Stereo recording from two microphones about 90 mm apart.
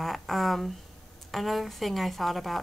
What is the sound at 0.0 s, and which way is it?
A woman's voice, centre (ahead or behind).